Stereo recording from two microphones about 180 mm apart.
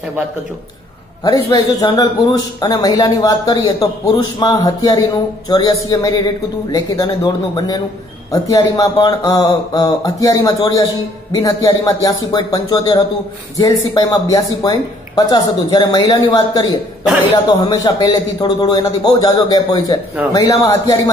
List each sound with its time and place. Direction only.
1.2 s a man's voice: 20° left (ahead or behind)